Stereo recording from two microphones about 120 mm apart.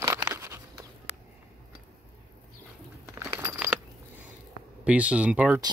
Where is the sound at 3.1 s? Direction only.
25° right (ahead or behind).